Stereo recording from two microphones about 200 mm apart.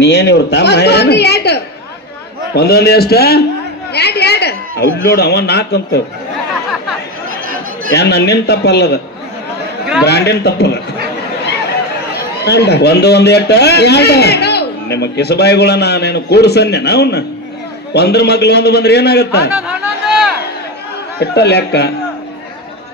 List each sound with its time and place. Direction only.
0.0 s a man's voice: 55° left (ahead or behind)
7.9 s a man's voice: 55° left (ahead or behind)
10.0 s a man's voice: 55° left (ahead or behind)
12.4 s a man's voice: 55° left (ahead or behind)
21.2 s a man's voice: 55° left (ahead or behind)